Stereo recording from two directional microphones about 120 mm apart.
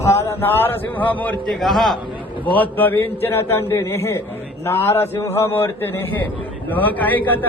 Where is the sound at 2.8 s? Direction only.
15° left (ahead or behind).